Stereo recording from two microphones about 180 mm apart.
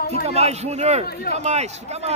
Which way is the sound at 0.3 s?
35° right (ahead or behind).